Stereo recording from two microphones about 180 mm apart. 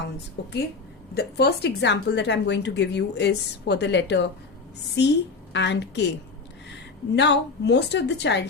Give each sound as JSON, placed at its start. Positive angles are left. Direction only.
{"t": 0.4, "sound": "a woman's voice", "side_deg": 70}
{"t": 7.2, "sound": "a woman's voice", "side_deg": 70}